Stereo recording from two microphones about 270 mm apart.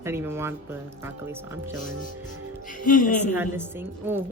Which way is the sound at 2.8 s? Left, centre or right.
Left.